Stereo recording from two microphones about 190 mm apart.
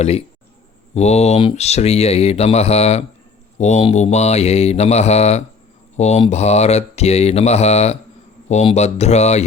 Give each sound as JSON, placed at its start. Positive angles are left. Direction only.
{"t": 0.0, "sound": "speech", "side_deg": 30}